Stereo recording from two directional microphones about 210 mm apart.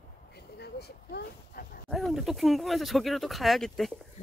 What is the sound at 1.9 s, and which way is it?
Speech, centre (ahead or behind).